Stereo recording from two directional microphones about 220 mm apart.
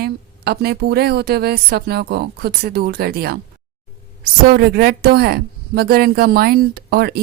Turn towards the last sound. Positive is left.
turn(degrees=-45)  # may be behind; listen again after turning